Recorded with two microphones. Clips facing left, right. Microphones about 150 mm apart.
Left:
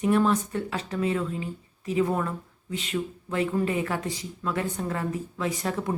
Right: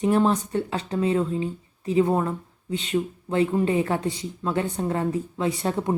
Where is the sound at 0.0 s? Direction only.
30° right (ahead or behind).